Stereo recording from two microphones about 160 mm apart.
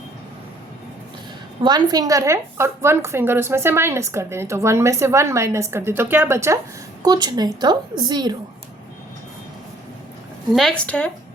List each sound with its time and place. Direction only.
1.6 s a woman's voice: 25° right (ahead or behind)
10.5 s speech: centre (ahead or behind)